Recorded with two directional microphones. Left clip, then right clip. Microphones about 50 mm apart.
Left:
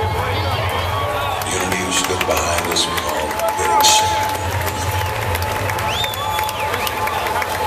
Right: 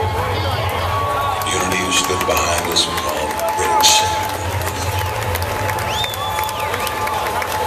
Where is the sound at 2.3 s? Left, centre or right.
Right.